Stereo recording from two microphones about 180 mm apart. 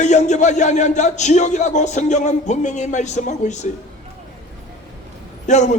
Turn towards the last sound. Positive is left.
turn(degrees=45)  # may be behind; listen again after turning